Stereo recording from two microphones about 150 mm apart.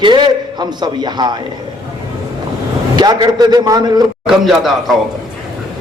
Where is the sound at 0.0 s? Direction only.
30° right (ahead or behind).